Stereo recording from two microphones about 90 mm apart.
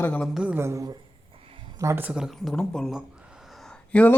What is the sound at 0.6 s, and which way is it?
Speech, 30° right (ahead or behind).